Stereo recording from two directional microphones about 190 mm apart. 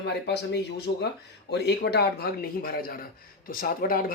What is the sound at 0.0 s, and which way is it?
A man's voice, 60° left (ahead or behind).